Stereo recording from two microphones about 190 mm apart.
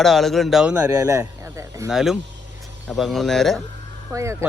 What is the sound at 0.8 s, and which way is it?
Speech, 15° right (ahead or behind).